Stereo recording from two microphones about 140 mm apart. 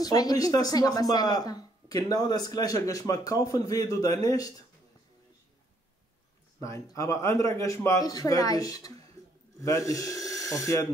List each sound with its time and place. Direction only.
0.0 s speech: 25° left (ahead or behind)
6.6 s speech: 20° left (ahead or behind)